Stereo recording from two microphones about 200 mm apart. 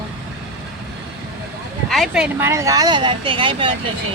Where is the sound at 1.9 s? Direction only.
Centre (ahead or behind); by 3.7 s 25° right (ahead or behind).